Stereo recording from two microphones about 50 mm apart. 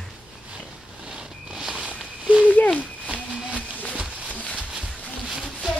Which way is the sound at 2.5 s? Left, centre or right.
Left.